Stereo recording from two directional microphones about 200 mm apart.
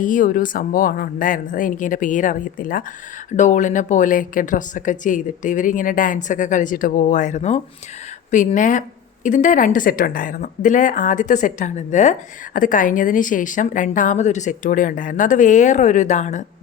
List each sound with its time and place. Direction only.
0.0 s speech: 40° left (ahead or behind)